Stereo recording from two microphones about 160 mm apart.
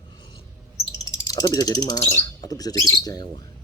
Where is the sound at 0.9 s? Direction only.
25° left (ahead or behind).